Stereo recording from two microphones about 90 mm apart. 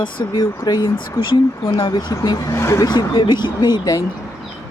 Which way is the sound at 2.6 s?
30° left (ahead or behind).